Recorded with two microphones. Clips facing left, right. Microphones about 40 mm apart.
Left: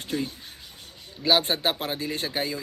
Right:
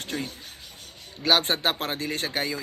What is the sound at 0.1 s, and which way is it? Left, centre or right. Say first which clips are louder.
A man's voice: left 4 dB; right.